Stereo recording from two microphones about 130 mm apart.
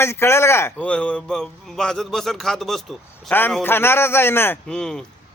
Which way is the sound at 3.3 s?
15° left (ahead or behind).